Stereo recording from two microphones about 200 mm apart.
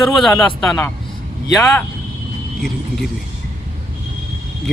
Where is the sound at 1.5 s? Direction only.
Centre (ahead or behind).